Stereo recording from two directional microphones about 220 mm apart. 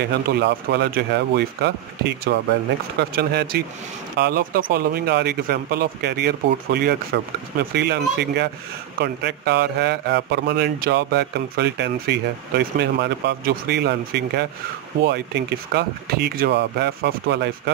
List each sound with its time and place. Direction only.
0.1 s a man's voice: 45° right (ahead or behind)